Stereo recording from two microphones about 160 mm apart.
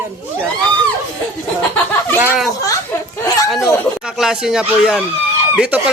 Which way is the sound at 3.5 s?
Centre (ahead or behind).